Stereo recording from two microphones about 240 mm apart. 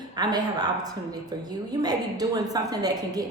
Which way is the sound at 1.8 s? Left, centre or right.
Centre.